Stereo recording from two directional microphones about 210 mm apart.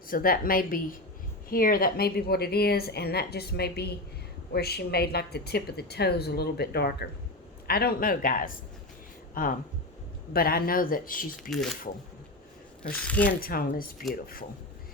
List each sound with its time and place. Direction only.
0.1 s a woman's voice: 45° left (ahead or behind)
13.0 s speech: 5° left (ahead or behind)
13.2 s a woman's voice: 45° left (ahead or behind)